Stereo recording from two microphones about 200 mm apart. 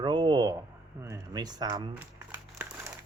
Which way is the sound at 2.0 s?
10° right (ahead or behind).